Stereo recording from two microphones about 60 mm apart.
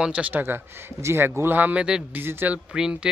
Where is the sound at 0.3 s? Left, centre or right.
Right.